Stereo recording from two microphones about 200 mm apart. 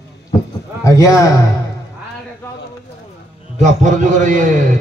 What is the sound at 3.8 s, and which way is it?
Speech, 40° right (ahead or behind).